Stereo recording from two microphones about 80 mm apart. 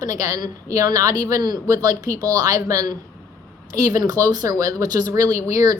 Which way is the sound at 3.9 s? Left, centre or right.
Right.